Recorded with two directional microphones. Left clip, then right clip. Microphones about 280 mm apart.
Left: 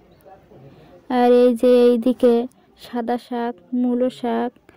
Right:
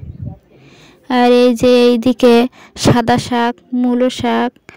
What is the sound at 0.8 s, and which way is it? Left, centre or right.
Speech, right.